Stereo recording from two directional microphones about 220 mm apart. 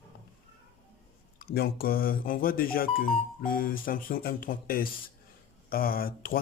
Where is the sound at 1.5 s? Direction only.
45° left (ahead or behind).